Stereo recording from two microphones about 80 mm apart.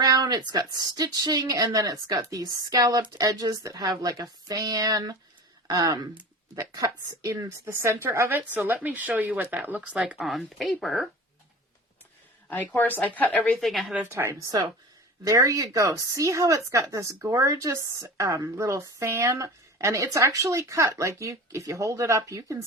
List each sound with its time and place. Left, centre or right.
0.0 s speech: right
3.8 s speech: right
7.7 s speech: right
10.2 s speech: centre
12.5 s a woman's voice: left
13.6 s speech: centre
14.1 s a woman's voice: right